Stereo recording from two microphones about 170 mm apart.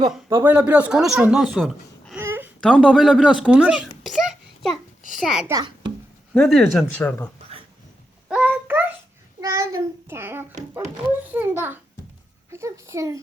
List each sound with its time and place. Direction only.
0.4 s speech: 10° right (ahead or behind)
2.2 s a sound: 15° right (ahead or behind)
2.6 s a child's voice: 5° left (ahead or behind)
5.5 s a child's voice: 25° right (ahead or behind)
6.3 s speech: centre (ahead or behind)
8.3 s a sound: 10° right (ahead or behind)
9.4 s a child's voice: 20° right (ahead or behind)
12.5 s a child's voice: 15° right (ahead or behind)